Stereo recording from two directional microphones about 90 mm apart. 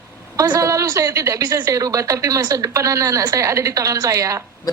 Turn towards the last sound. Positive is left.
turn(degrees=-40)  # may be behind; listen again after turning